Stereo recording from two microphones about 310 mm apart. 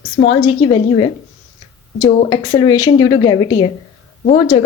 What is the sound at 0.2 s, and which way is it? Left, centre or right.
A woman's voice, centre.